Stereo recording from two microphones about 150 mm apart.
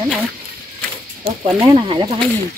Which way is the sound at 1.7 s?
35° right (ahead or behind).